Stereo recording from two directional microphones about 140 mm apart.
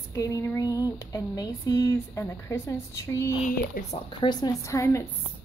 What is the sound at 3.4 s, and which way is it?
Speech, 80° left.